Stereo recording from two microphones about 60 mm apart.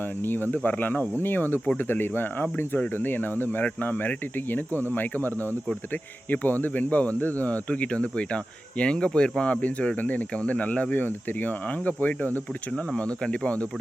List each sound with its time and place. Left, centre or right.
0.2 s speech: left
13.0 s speech: centre